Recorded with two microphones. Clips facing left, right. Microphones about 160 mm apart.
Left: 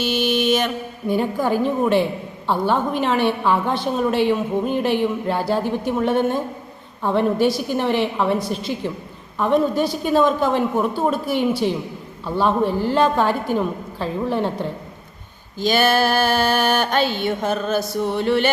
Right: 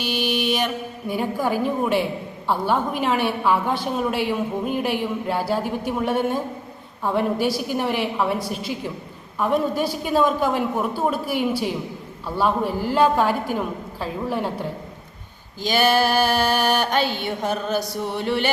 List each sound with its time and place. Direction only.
0.0 s mantra: 15° right (ahead or behind)
1.1 s a woman's voice: 10° right (ahead or behind)
15.6 s a woman's voice: 15° right (ahead or behind)